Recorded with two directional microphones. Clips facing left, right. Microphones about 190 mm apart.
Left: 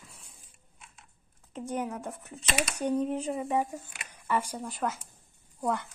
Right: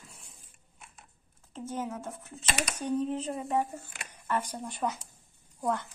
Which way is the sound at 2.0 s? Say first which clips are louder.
Left 1 dB; centre (ahead or behind).